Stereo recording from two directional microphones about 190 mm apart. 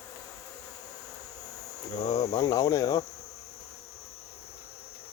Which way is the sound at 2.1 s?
20° left (ahead or behind).